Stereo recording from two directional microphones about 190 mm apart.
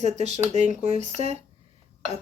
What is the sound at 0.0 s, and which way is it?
A woman's voice, 35° right (ahead or behind).